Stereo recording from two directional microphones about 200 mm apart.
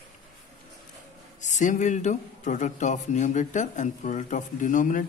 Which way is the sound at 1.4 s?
40° left (ahead or behind).